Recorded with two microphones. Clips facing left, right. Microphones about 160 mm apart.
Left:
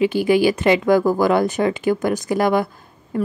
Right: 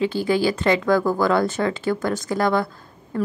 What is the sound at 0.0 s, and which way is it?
A woman's voice, 15° left (ahead or behind).